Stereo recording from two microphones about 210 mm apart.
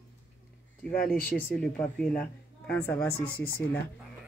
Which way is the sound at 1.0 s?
45° left (ahead or behind).